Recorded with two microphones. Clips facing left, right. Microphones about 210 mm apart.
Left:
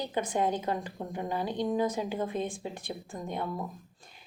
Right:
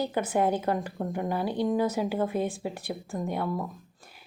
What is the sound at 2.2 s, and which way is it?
A woman's voice, 10° right (ahead or behind).